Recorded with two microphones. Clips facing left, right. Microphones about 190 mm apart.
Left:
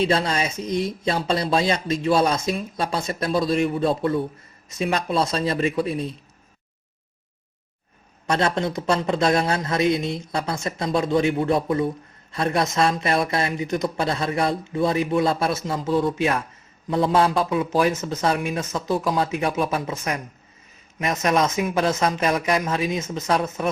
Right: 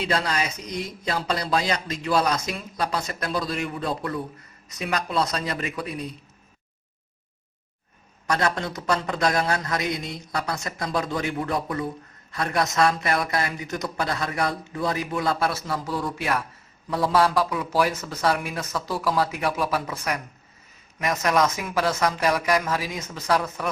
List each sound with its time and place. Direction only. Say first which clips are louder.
0.0 s speech: left 4 dB; 25° left (ahead or behind)
8.3 s speech: left 3 dB; 25° left (ahead or behind)